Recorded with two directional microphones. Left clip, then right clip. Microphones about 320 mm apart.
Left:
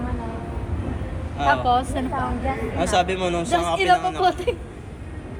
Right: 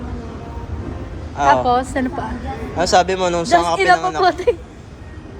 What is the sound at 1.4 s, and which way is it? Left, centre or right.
Speech, right.